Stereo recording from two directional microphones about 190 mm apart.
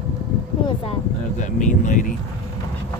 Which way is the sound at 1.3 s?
40° left (ahead or behind).